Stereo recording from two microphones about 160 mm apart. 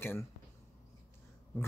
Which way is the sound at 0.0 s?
15° left (ahead or behind).